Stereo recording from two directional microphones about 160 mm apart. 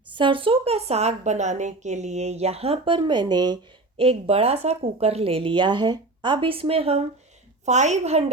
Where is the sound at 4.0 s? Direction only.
35° right (ahead or behind).